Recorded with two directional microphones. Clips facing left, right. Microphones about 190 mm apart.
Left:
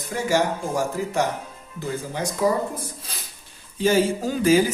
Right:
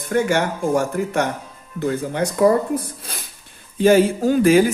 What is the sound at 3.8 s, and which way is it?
Speech, 55° right (ahead or behind).